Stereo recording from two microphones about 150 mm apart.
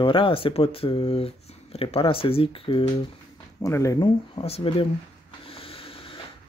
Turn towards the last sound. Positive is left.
turn(degrees=40)  # may be behind; listen again after turning